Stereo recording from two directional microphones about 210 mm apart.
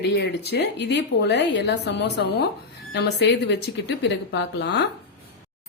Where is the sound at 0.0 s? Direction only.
55° left (ahead or behind).